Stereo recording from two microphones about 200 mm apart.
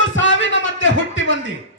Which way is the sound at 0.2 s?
70° left (ahead or behind).